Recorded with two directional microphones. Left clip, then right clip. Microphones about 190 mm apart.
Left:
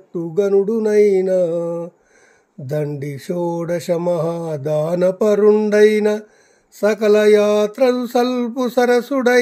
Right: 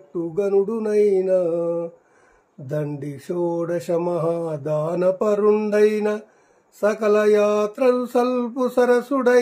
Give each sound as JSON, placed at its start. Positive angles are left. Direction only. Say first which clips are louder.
{"t": 0.1, "sound": "mantra", "louder": "left 4 dB", "side_deg": 45}